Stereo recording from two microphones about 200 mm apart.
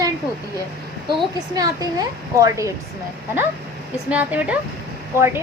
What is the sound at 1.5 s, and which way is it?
A woman's voice, 20° right (ahead or behind).